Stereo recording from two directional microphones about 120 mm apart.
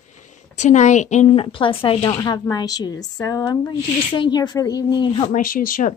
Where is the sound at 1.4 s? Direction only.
50° left (ahead or behind).